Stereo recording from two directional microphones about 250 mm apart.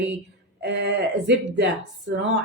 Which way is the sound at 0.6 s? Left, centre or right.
Right.